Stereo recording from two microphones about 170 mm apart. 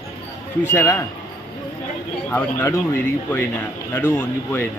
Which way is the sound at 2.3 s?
15° left (ahead or behind).